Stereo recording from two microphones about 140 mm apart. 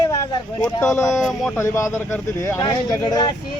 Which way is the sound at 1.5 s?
20° left (ahead or behind).